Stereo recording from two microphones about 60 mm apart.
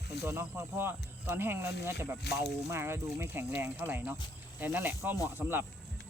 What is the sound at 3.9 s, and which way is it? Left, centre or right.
Speech, right.